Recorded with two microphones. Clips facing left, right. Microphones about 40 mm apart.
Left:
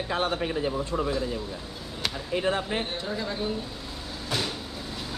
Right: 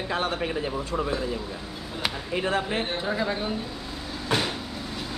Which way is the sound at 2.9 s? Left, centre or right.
Right.